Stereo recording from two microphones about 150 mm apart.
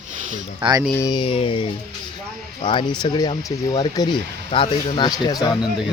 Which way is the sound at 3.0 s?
30° left (ahead or behind).